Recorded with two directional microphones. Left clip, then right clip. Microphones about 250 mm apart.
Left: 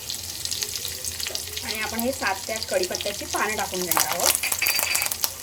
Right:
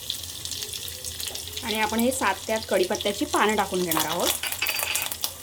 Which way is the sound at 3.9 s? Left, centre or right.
Centre.